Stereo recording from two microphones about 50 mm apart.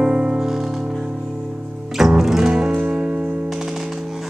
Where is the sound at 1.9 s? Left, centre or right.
Centre.